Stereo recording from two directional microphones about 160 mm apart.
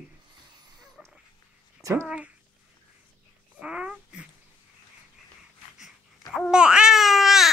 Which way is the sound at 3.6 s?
5° right (ahead or behind).